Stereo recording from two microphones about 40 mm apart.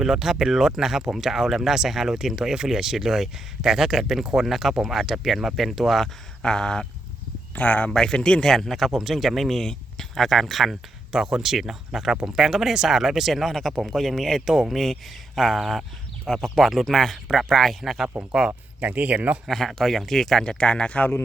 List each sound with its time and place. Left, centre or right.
0.0 s speech: centre
6.4 s a sound: centre
7.5 s speech: left
7.9 s speech: centre
8.1 s a sound: left
8.4 s speech: centre
9.6 s a sound: centre
10.2 s speech: centre
11.1 s speech: centre
16.8 s speech: centre
18.8 s speech: right
19.5 s speech: centre; by 21.0 s left